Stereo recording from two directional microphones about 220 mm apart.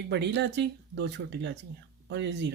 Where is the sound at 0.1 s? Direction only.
50° right (ahead or behind).